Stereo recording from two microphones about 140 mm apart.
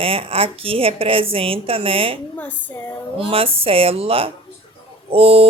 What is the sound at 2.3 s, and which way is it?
Speech, 10° left (ahead or behind).